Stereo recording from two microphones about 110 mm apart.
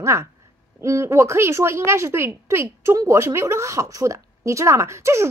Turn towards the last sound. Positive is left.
turn(degrees=-25)  # may be behind; listen again after turning